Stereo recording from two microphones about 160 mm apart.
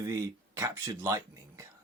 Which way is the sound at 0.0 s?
20° right (ahead or behind).